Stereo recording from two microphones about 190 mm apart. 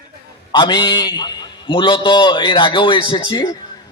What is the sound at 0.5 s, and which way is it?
A man's voice, 25° left (ahead or behind).